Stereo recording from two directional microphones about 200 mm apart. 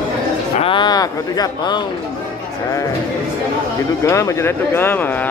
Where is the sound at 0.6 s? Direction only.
25° left (ahead or behind).